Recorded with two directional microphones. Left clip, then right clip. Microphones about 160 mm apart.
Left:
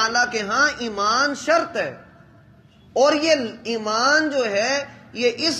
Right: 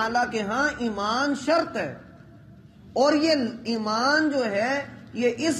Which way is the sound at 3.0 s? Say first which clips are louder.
Left 4 dB; 10° left (ahead or behind).